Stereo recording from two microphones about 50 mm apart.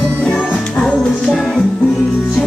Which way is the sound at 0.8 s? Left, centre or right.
Centre.